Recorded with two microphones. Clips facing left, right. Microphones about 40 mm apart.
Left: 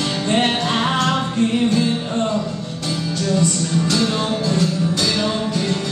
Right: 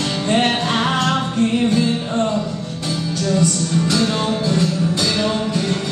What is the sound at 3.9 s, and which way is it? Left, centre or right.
Music, centre.